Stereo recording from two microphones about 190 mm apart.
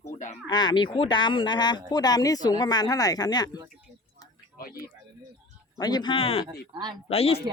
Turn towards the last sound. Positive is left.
turn(degrees=30)  # may be behind; listen again after turning